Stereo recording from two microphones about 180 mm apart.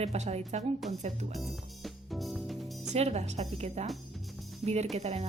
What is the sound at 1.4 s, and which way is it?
Music, centre (ahead or behind).